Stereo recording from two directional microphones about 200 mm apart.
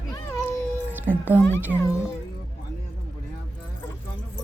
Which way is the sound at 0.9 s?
10° right (ahead or behind).